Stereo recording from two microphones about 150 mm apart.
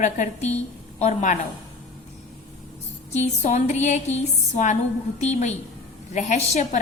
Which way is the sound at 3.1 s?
45° left (ahead or behind).